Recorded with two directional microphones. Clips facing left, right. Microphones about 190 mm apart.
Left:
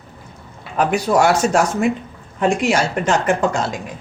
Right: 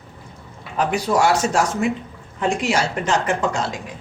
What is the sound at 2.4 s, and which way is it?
Speech, 50° left (ahead or behind).